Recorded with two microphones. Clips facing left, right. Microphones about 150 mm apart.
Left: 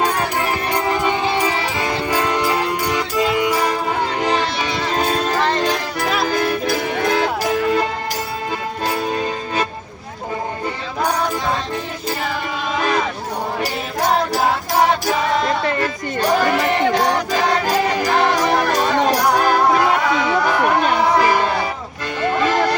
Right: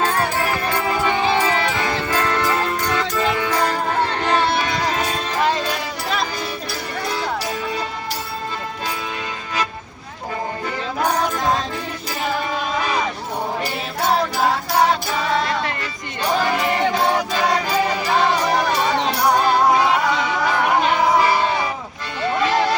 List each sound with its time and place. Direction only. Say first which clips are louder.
0.7 s music: left 3 dB; 20° left (ahead or behind)
4.5 s music: right 1 dB; 50° right (ahead or behind)
4.9 s music: left 3 dB; 35° left (ahead or behind)
5.6 s music: left 5 dB; 90° left
6.3 s music: left 9 dB; 55° left (ahead or behind)
18.7 s music: left 3 dB; 50° left (ahead or behind)
22.4 s a sound: left 1 dB; 50° left (ahead or behind)